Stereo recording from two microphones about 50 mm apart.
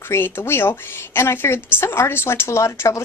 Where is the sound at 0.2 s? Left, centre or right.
Left.